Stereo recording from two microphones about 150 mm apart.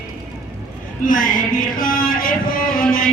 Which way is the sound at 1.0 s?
65° left (ahead or behind).